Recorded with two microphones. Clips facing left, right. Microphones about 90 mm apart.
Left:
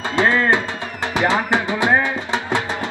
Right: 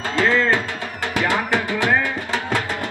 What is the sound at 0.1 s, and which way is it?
Music, 20° left (ahead or behind).